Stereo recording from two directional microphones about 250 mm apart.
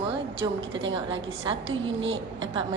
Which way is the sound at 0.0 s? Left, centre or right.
Right.